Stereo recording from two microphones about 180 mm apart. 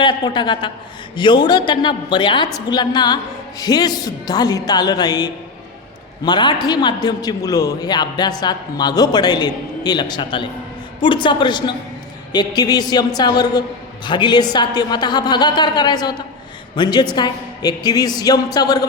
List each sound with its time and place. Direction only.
0.0 s a man's voice: 25° left (ahead or behind)